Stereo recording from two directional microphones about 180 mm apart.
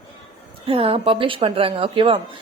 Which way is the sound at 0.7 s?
30° right (ahead or behind).